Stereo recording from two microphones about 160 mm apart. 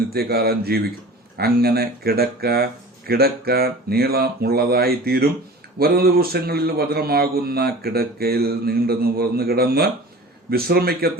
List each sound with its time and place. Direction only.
0.1 s a man's voice: 75° right (ahead or behind)